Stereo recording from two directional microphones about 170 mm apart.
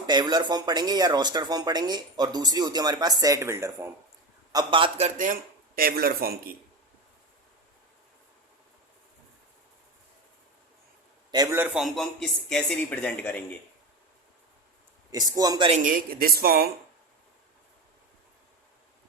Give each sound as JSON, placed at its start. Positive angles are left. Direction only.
{"t": 0.1, "sound": "speech", "side_deg": -25}
{"t": 4.5, "sound": "speech", "side_deg": -30}
{"t": 11.5, "sound": "speech", "side_deg": -10}
{"t": 15.1, "sound": "speech", "side_deg": -20}
{"t": 15.7, "sound": "speech", "side_deg": -50}